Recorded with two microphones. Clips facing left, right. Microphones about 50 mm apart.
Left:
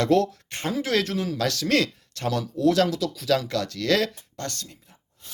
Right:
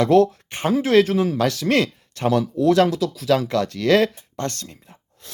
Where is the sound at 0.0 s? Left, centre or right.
Centre.